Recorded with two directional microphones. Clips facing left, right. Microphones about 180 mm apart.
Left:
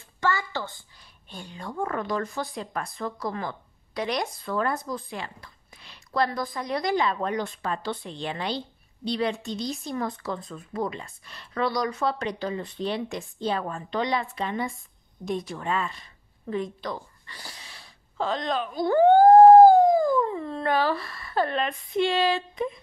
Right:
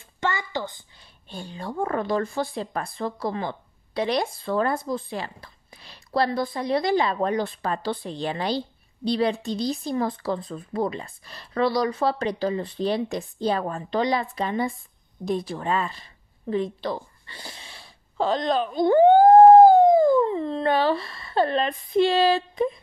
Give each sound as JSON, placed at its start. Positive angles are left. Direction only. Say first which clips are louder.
{"t": 0.2, "sound": "a woman's voice", "louder": "even", "side_deg": -20}
{"t": 1.3, "sound": "speech", "louder": "right 4 dB", "side_deg": -30}